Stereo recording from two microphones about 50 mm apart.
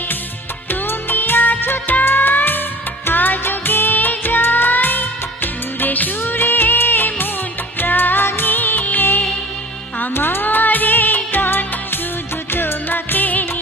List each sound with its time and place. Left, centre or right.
0.7 s music: left
10.0 s music: left